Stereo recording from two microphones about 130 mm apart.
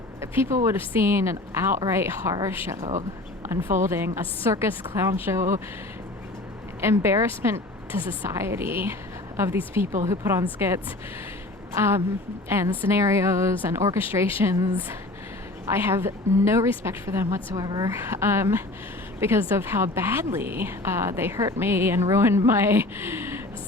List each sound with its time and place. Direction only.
0.2 s a woman's voice: 20° right (ahead or behind)
6.8 s a woman's voice: 20° right (ahead or behind)